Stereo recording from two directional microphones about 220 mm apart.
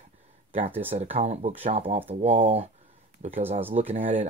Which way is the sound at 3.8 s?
25° right (ahead or behind).